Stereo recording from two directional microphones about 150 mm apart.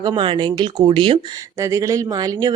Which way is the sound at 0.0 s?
30° right (ahead or behind).